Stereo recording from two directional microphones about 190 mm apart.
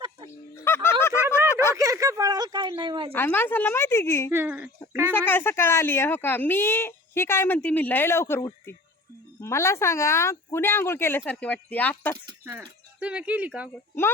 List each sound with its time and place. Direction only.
0.5 s a sound: 15° left (ahead or behind)
1.7 s a sound: 15° right (ahead or behind)
3.2 s speech: 10° left (ahead or behind)
4.3 s speech: 10° right (ahead or behind)
5.1 s speech: 10° left (ahead or behind)
12.1 s speech: 20° right (ahead or behind)
12.5 s speech: 5° right (ahead or behind)